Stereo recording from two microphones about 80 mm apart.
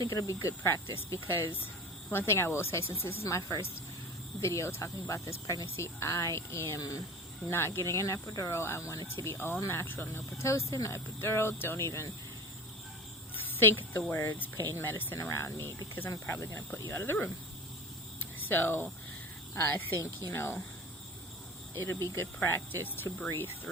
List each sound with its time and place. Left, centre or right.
0.0 s speech: left
7.5 s speech: left
9.2 s speech: left
13.4 s a sound: left
14.1 s speech: left
18.4 s speech: left
21.8 s speech: left